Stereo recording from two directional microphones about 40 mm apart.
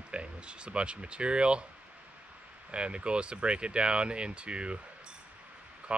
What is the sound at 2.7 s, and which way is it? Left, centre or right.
Speech, right.